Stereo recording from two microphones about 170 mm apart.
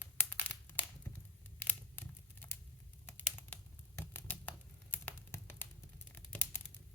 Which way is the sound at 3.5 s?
10° left (ahead or behind).